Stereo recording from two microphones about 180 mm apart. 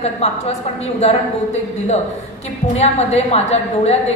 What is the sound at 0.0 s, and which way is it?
A woman's voice, 35° left (ahead or behind).